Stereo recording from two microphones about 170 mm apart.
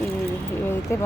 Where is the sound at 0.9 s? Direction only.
15° left (ahead or behind).